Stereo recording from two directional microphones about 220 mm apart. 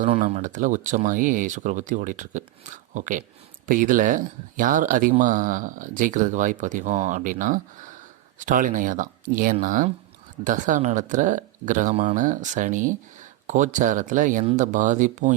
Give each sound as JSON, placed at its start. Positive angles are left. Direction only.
{"t": 0.0, "sound": "speech", "side_deg": -30}